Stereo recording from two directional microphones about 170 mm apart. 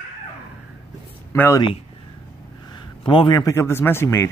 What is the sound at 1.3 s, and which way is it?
Speech, 15° left (ahead or behind).